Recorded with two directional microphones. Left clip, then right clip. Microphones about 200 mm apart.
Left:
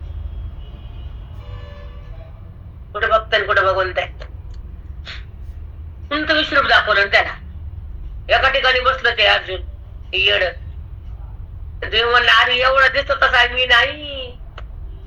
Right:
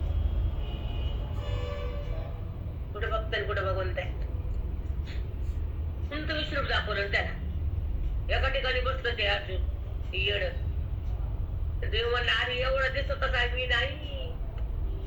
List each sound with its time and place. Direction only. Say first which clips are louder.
2.9 s a man's voice: left 16 dB; 45° left (ahead or behind)
5.1 s a sound: left 15 dB; 45° left (ahead or behind)
6.1 s a man's voice: left 16 dB; 45° left (ahead or behind)
11.8 s a man's voice: left 15 dB; 45° left (ahead or behind)